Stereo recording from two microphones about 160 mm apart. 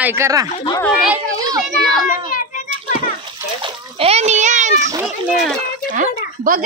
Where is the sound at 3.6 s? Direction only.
40° right (ahead or behind).